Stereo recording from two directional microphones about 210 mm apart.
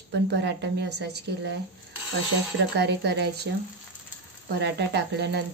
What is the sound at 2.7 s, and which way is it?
Speech, 55° right (ahead or behind).